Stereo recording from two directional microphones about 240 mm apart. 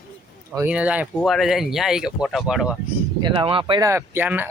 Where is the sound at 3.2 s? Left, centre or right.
Right.